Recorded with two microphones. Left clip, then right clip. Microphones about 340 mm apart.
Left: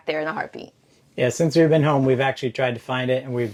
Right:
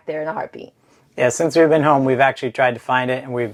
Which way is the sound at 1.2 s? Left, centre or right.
Right.